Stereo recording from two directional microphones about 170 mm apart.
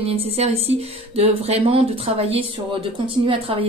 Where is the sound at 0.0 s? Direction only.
35° right (ahead or behind).